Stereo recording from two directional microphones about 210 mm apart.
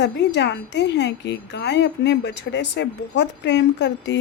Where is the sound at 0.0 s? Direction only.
55° left (ahead or behind).